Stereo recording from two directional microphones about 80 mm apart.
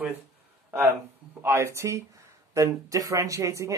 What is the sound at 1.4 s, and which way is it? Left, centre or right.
A man's voice, right.